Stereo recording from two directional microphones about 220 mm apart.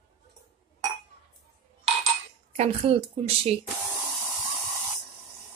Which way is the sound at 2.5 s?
30° right (ahead or behind).